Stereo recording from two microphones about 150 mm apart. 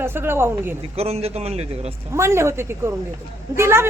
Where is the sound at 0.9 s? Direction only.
45° right (ahead or behind).